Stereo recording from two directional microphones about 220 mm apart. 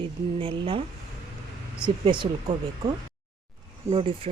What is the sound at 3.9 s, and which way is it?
Speech, 25° right (ahead or behind).